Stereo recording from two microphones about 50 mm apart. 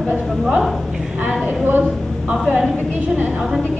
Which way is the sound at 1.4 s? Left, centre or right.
Right.